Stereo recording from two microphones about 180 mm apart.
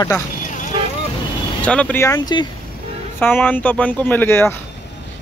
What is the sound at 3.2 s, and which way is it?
Speech, 10° left (ahead or behind).